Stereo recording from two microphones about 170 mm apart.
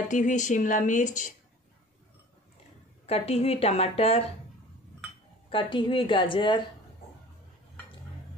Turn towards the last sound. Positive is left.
turn(degrees=30)  # may be behind; listen again after turning